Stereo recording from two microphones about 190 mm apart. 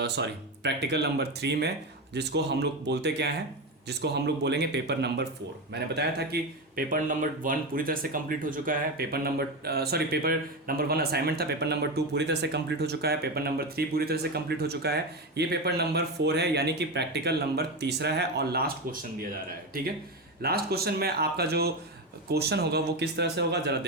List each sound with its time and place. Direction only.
0.0 s speech: 65° right (ahead or behind)
20.4 s speech: 55° right (ahead or behind)